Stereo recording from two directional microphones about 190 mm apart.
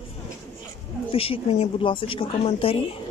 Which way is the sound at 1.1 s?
30° left (ahead or behind).